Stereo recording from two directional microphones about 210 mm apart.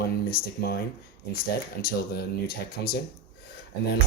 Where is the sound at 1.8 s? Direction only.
45° left (ahead or behind).